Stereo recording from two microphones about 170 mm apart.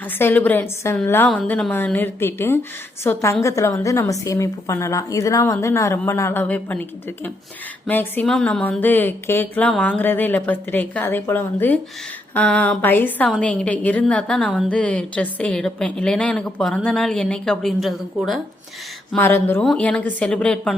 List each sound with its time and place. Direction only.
0.2 s speech: 10° left (ahead or behind)
7.9 s a woman's voice: 10° left (ahead or behind)
19.1 s speech: 10° left (ahead or behind)